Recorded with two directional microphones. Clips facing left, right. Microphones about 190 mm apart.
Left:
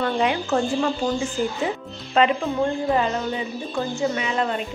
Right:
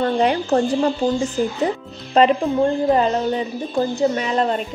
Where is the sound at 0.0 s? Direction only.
40° right (ahead or behind).